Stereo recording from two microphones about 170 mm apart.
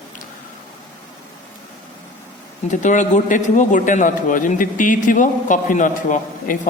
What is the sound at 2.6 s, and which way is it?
A man's voice, 45° left (ahead or behind).